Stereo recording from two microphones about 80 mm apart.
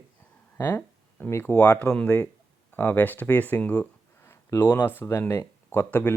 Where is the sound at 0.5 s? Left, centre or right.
Left.